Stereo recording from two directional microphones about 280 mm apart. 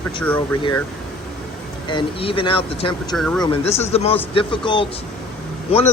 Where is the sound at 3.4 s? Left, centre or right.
Centre.